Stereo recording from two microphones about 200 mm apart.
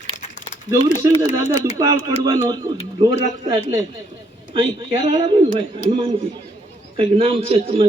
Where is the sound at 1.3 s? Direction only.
15° right (ahead or behind).